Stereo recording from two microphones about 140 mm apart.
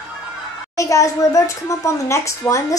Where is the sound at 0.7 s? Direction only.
25° left (ahead or behind).